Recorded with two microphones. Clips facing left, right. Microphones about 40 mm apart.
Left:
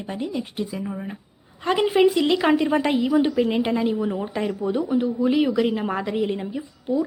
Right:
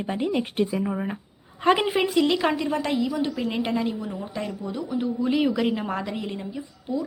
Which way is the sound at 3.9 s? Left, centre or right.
Left.